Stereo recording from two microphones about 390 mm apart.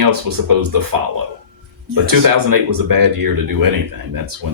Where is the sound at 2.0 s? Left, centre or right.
Right.